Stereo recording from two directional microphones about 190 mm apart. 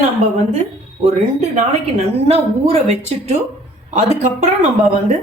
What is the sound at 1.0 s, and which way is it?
A man's voice, 35° right (ahead or behind).